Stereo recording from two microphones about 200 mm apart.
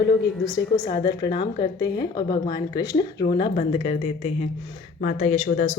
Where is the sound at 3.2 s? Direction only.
30° left (ahead or behind).